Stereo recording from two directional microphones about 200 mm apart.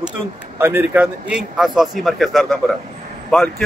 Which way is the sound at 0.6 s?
10° right (ahead or behind).